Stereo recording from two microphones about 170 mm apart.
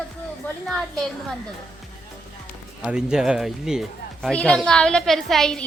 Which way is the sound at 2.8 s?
5° right (ahead or behind).